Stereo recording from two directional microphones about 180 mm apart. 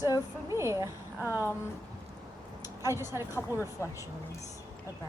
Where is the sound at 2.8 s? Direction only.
15° right (ahead or behind).